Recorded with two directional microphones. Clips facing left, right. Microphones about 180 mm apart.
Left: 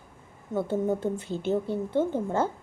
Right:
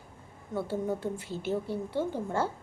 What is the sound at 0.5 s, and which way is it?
Speech, 20° left (ahead or behind).